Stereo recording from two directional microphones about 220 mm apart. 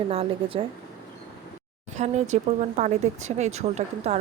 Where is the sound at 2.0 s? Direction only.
30° right (ahead or behind).